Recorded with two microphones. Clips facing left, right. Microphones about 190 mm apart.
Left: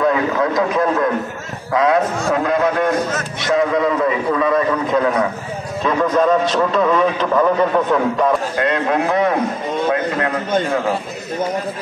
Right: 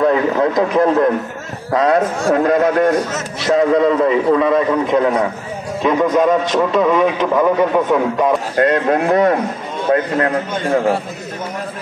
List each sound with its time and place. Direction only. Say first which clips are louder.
0.0 s a man's voice: right 3 dB; 30° right (ahead or behind); by 2.9 s 45° right (ahead or behind)
3.2 s a man's voice: right 2 dB; 30° right (ahead or behind); by 8.3 s 10° right (ahead or behind)
8.5 s a man's voice: right 3 dB; 50° right (ahead or behind)